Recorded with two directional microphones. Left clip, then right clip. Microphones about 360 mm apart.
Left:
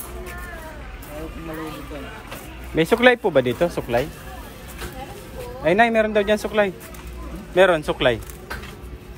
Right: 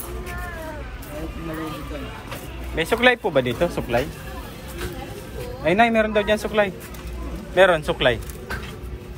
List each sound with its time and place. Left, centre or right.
2.7 s speech: left
5.6 s speech: left